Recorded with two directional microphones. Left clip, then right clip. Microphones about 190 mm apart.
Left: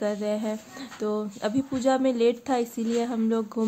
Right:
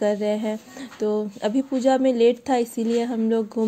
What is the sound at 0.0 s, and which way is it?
Speech, 20° right (ahead or behind).